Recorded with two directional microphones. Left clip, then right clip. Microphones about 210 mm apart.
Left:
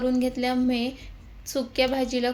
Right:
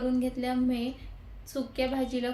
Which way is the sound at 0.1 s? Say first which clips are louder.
Left 5 dB; 40° left (ahead or behind).